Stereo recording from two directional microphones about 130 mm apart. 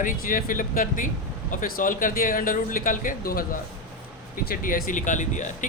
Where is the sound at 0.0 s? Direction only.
90° left.